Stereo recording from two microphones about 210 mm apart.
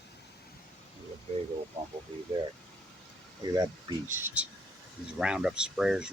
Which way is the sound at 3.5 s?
20° right (ahead or behind).